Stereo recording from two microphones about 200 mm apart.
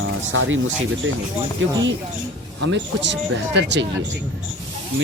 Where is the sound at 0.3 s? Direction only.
75° right (ahead or behind).